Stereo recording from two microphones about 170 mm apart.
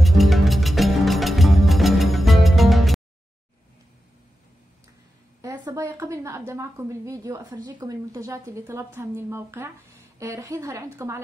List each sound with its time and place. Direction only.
0.0 s music: centre (ahead or behind)
5.4 s a woman's voice: 20° right (ahead or behind)